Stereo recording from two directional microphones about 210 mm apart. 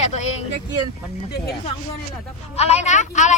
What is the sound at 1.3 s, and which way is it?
Speech, 50° left (ahead or behind).